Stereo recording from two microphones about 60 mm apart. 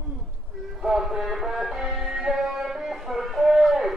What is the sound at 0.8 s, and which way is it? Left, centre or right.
Music, centre.